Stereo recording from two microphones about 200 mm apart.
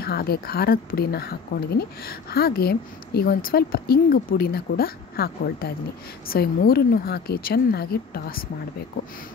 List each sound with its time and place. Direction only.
0.0 s speech: 50° left (ahead or behind)